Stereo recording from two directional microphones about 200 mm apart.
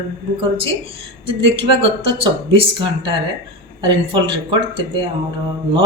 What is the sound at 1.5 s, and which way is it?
Speech, 25° right (ahead or behind).